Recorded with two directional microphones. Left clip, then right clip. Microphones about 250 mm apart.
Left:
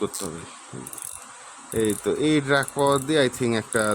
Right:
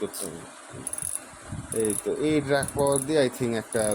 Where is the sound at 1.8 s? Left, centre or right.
Centre.